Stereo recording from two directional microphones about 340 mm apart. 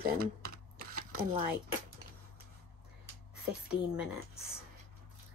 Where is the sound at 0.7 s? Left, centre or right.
Right.